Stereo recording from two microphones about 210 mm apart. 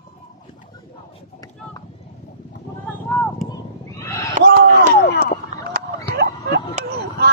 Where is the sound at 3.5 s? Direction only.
15° left (ahead or behind).